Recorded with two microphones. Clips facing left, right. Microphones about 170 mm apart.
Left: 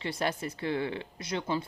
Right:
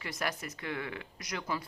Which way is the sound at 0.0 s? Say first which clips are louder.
Left 5 dB; 30° left (ahead or behind).